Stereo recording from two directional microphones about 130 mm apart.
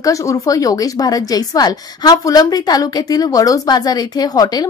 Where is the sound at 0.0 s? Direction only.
25° left (ahead or behind).